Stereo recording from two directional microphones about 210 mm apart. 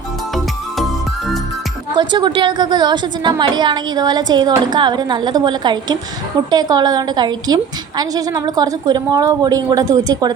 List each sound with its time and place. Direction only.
2.0 s a woman's voice: 20° right (ahead or behind)